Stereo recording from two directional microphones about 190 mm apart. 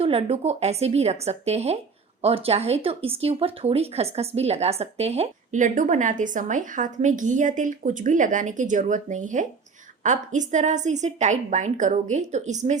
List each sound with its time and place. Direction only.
0.0 s speech: 30° right (ahead or behind)